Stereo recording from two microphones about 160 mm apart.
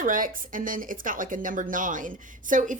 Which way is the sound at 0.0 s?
55° right (ahead or behind).